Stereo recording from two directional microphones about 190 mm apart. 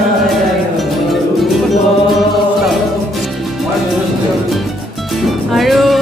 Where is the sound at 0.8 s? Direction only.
Centre (ahead or behind).